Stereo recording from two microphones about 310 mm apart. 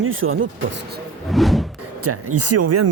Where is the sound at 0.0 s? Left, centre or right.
Right.